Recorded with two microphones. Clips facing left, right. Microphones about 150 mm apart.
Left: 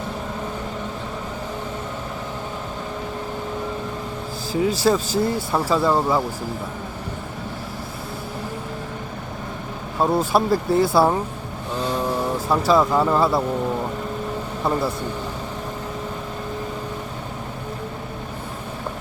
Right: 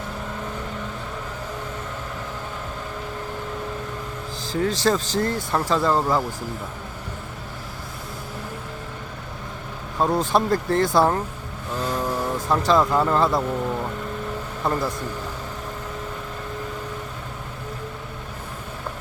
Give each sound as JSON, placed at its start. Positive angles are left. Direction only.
{"t": 4.5, "sound": "speech", "side_deg": 10}
{"t": 10.0, "sound": "speech", "side_deg": 5}
{"t": 11.7, "sound": "vehicle", "side_deg": 30}
{"t": 12.2, "sound": "speech", "side_deg": 5}
{"t": 14.6, "sound": "speech", "side_deg": 5}